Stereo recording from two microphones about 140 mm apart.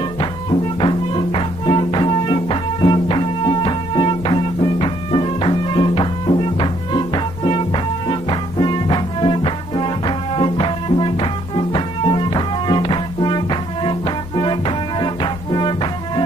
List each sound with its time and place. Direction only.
0.2 s music: 40° left (ahead or behind)